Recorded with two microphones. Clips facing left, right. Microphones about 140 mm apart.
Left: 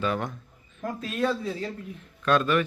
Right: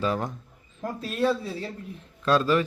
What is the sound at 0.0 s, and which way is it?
A man's voice, 35° right (ahead or behind).